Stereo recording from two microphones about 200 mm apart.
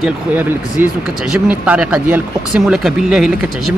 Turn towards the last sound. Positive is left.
turn(degrees=0)  # may be behind; listen again after turning